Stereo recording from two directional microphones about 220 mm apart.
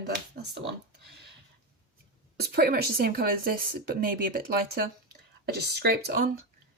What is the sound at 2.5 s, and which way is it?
A woman's voice, 45° right (ahead or behind).